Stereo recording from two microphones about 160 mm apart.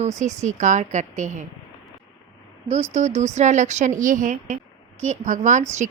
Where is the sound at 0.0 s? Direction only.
45° right (ahead or behind).